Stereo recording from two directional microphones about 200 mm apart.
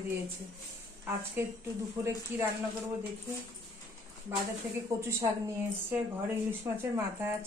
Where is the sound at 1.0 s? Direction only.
15° right (ahead or behind).